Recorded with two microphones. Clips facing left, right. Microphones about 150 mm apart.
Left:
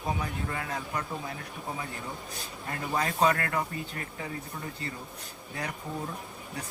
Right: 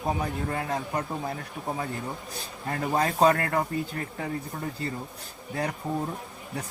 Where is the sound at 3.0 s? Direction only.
35° right (ahead or behind).